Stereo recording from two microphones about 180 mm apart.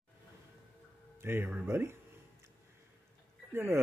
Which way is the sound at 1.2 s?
10° right (ahead or behind).